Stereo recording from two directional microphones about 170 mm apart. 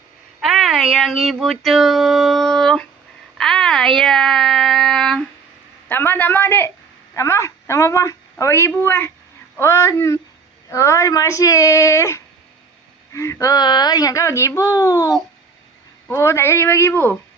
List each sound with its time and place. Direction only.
0.4 s speech: centre (ahead or behind)
3.3 s a sound: 5° left (ahead or behind)
5.9 s a woman's voice: 10° left (ahead or behind)